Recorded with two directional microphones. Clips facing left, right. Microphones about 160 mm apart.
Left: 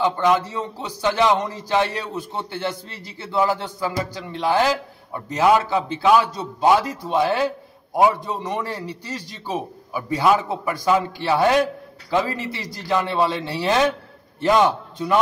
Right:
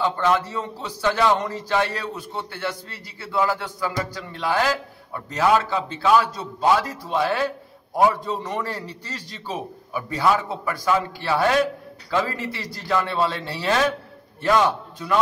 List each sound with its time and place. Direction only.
0.0 s a man's voice: 15° left (ahead or behind)